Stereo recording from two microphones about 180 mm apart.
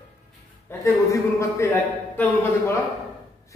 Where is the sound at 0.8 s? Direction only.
15° left (ahead or behind).